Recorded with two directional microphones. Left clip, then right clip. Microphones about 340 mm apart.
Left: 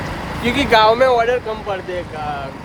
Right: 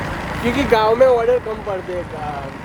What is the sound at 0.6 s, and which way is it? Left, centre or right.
Speech, left.